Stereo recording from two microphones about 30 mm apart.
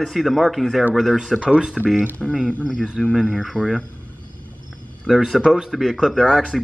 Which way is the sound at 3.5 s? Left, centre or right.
Left.